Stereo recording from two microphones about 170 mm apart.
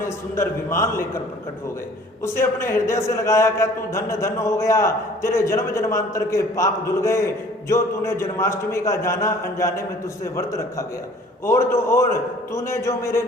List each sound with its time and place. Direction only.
0.0 s a man's voice: 15° left (ahead or behind)
2.2 s a man's voice: 15° left (ahead or behind)